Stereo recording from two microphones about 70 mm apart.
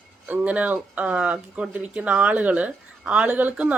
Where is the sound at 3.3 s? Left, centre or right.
Right.